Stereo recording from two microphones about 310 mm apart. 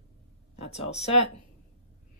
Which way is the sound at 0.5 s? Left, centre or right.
Centre.